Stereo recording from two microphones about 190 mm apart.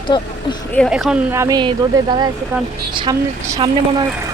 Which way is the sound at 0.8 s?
Centre (ahead or behind).